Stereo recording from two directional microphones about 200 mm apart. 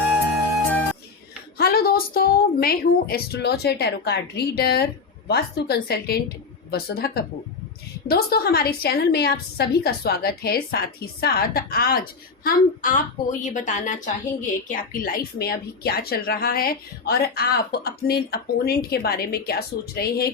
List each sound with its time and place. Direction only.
1.5 s a woman's voice: 50° left (ahead or behind)